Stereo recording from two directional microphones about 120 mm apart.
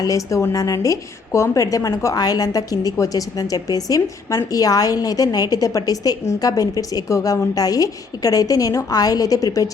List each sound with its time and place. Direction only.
0.0 s a woman's voice: 30° left (ahead or behind)